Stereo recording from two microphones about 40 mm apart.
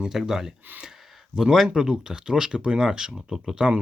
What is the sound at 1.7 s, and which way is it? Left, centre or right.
Speech, centre.